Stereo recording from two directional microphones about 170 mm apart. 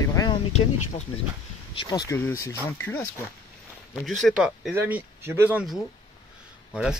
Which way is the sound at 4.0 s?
Centre (ahead or behind).